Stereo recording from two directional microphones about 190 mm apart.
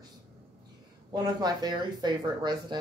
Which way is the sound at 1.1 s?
20° right (ahead or behind).